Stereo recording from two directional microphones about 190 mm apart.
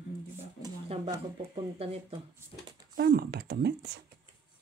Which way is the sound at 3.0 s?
55° right (ahead or behind).